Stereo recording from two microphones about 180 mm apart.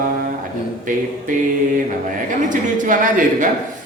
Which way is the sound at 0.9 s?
45° right (ahead or behind).